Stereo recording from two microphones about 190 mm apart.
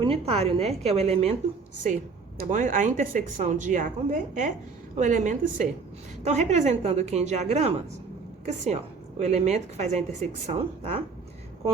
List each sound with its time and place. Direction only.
0.0 s a woman's voice: 30° right (ahead or behind)
2.4 s a woman's voice: 40° right (ahead or behind)